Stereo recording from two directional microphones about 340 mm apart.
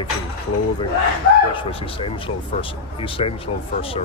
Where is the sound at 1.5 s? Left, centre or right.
Centre.